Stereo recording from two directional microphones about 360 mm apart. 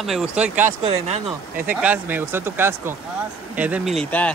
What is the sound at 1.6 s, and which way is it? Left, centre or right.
Speech, centre.